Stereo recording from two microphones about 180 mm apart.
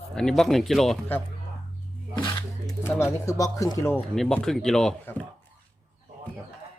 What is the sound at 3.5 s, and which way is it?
Speech, 20° left (ahead or behind).